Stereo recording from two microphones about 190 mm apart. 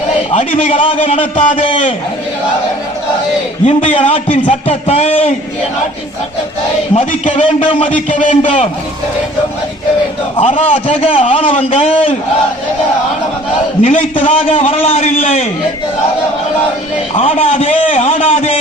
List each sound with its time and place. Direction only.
0.3 s a man's voice: 30° left (ahead or behind)
3.7 s a man's voice: 35° left (ahead or behind)
6.9 s a man's voice: 30° left (ahead or behind)
10.3 s a man's voice: 30° left (ahead or behind)
13.8 s a man's voice: 35° left (ahead or behind)
17.2 s a man's voice: 35° left (ahead or behind)